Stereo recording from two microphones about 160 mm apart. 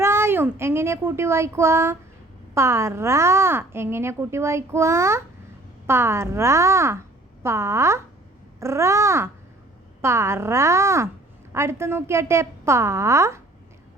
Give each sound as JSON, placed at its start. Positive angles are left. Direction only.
{"t": 0.0, "sound": "a child's voice", "side_deg": -15}